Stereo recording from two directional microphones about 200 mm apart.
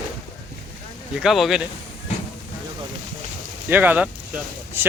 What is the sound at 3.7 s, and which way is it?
Speech, 10° right (ahead or behind).